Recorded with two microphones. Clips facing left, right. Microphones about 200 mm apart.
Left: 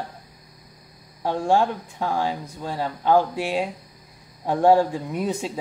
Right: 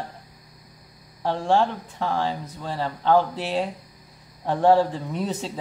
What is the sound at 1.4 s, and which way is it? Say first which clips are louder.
Speech: left 1 dB; 10° left (ahead or behind).